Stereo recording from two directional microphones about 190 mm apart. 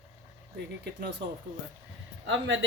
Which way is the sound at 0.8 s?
60° right (ahead or behind).